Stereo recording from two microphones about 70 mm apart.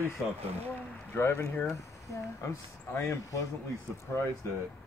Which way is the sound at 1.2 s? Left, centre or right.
Left.